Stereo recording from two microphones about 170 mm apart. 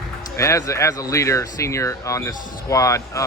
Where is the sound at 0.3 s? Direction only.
15° left (ahead or behind).